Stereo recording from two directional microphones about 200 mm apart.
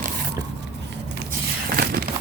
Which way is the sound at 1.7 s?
50° right (ahead or behind).